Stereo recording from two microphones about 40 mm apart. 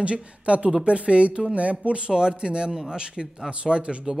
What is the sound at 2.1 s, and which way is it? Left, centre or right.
Speech, centre.